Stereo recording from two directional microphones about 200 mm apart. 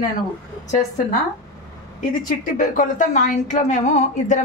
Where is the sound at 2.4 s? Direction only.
40° left (ahead or behind).